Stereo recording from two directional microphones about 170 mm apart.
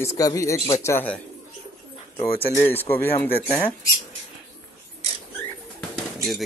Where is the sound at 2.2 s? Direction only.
10° left (ahead or behind).